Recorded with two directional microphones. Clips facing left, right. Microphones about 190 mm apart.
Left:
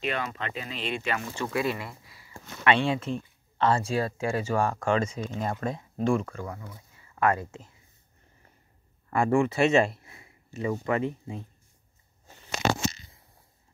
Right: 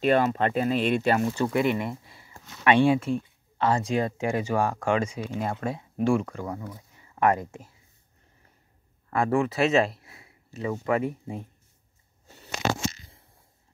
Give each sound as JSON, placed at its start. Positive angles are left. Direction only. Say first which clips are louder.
{"t": 0.0, "sound": "speech", "louder": "right 10 dB", "side_deg": -40}
{"t": 1.5, "sound": "speech", "louder": "right 4 dB", "side_deg": -20}
{"t": 2.6, "sound": "speech", "louder": "right 4 dB", "side_deg": -15}
{"t": 9.1, "sound": "speech", "louder": "left 1 dB", "side_deg": 0}